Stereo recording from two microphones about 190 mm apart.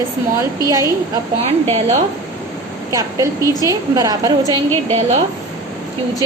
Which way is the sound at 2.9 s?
15° right (ahead or behind).